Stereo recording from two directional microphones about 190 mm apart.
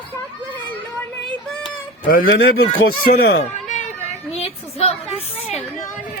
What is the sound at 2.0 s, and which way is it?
Music, 50° left (ahead or behind).